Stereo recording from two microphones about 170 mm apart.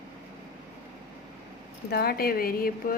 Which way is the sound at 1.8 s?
70° left (ahead or behind).